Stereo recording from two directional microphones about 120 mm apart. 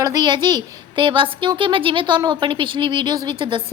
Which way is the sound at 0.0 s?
30° right (ahead or behind).